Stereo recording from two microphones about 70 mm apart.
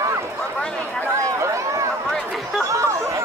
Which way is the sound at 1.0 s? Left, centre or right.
Right.